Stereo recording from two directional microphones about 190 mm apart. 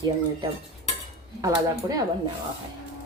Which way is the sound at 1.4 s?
20° right (ahead or behind).